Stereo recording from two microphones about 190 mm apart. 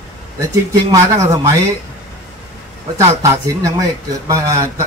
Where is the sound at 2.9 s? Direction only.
15° right (ahead or behind).